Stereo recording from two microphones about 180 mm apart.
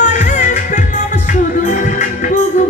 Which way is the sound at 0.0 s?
40° left (ahead or behind).